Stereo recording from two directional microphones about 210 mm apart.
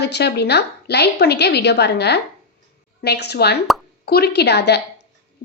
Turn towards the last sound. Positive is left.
turn(degrees=50)  # may be behind; listen again after turning